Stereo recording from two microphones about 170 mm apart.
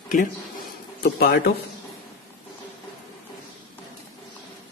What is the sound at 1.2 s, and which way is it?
Speech, 70° left (ahead or behind).